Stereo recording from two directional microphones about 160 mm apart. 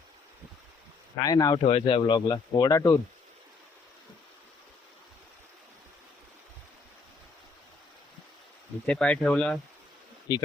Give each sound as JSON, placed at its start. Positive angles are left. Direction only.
{"t": 1.2, "sound": "speech", "side_deg": 25}
{"t": 1.6, "sound": "speech", "side_deg": 35}
{"t": 8.9, "sound": "speech", "side_deg": 5}
{"t": 10.3, "sound": "speech", "side_deg": 30}